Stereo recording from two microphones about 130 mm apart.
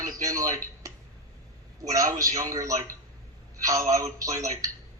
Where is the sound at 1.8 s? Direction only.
25° right (ahead or behind).